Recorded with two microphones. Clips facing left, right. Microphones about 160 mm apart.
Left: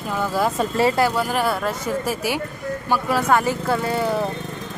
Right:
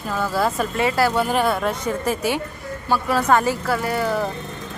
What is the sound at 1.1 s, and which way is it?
Speech, centre (ahead or behind).